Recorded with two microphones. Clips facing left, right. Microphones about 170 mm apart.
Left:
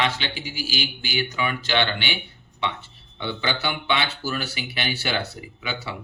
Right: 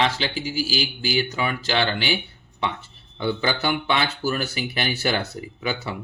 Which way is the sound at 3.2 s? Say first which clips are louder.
Right 4 dB; 45° right (ahead or behind).